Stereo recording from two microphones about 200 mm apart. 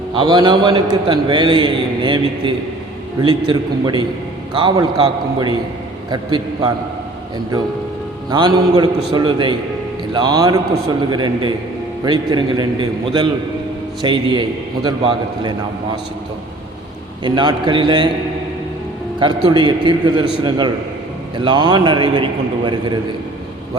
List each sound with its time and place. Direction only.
0.1 s a man's voice: 20° right (ahead or behind)
8.3 s a man's voice: 20° right (ahead or behind)
17.2 s a man's voice: 25° right (ahead or behind)
19.2 s a man's voice: 25° right (ahead or behind)